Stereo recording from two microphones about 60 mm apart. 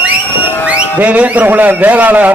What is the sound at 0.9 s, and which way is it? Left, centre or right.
Speech, right.